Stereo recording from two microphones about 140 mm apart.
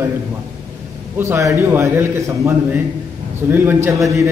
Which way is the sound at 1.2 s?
20° right (ahead or behind).